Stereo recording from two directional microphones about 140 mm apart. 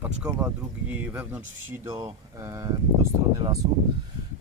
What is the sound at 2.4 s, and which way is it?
Speech, 20° right (ahead or behind).